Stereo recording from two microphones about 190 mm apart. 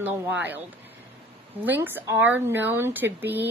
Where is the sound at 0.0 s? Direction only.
10° right (ahead or behind).